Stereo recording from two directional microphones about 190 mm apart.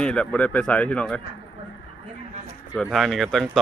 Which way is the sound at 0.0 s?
5° left (ahead or behind).